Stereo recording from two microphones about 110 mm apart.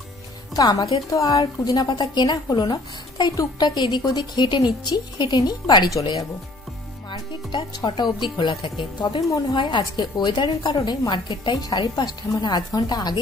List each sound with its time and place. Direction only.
0.6 s a woman's voice: 35° left (ahead or behind)
7.1 s a woman's voice: 45° left (ahead or behind)